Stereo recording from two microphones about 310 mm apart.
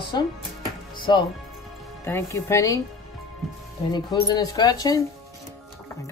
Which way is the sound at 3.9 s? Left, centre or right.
Centre.